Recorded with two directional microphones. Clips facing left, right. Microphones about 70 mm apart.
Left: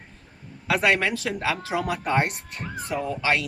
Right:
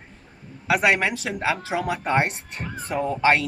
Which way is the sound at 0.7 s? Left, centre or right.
Centre.